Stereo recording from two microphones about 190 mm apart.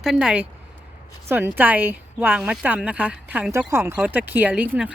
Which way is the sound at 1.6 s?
10° right (ahead or behind).